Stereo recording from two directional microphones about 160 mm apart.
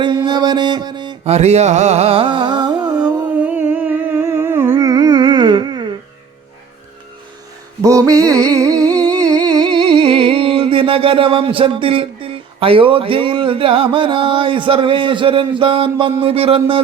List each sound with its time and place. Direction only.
0.0 s mantra: 30° right (ahead or behind)
1.2 s music: 40° right (ahead or behind); by 3.1 s 25° right (ahead or behind)
3.3 s humming: 10° right (ahead or behind); by 5.9 s 25° right (ahead or behind)
7.8 s a sound: 20° right (ahead or behind)